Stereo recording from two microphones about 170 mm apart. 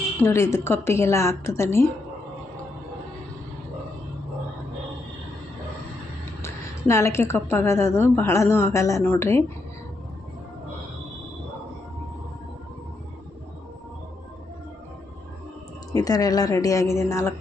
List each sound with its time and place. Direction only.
0.2 s a woman's voice: 15° left (ahead or behind)
6.4 s a woman's voice: 15° left (ahead or behind)
15.9 s speech: 20° left (ahead or behind)